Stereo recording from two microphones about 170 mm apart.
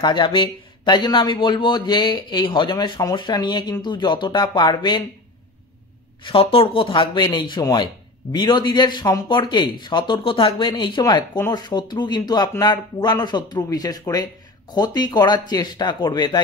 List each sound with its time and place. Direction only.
0.0 s a man's voice: 25° left (ahead or behind)
6.2 s a man's voice: 35° left (ahead or behind)